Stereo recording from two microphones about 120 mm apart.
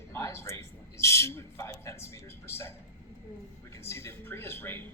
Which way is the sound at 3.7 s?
20° left (ahead or behind).